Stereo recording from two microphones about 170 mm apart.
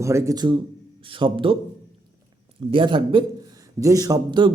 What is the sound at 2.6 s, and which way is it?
A man's voice, 30° right (ahead or behind).